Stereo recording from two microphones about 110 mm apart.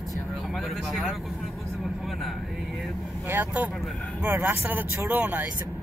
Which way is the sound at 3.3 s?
15° right (ahead or behind).